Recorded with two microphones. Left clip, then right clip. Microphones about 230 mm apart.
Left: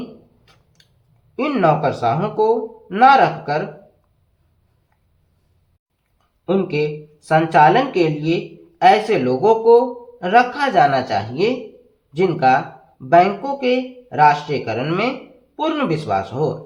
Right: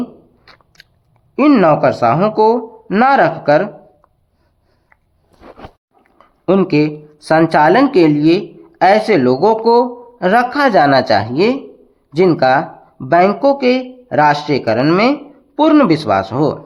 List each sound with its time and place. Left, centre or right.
0.4 s biting: right
1.4 s speech: right
6.1 s a sound: right
7.3 s speech: right